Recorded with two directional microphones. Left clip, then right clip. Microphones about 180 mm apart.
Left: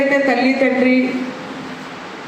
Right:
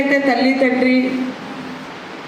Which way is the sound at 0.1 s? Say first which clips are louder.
Even; 20° right (ahead or behind).